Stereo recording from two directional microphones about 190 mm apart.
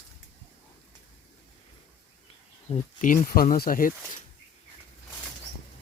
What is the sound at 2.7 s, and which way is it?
Speech, 35° left (ahead or behind).